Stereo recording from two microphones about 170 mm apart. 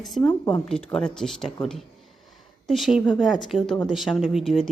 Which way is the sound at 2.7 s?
Centre (ahead or behind).